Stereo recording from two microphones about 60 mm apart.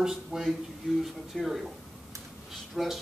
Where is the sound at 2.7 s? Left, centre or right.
Centre.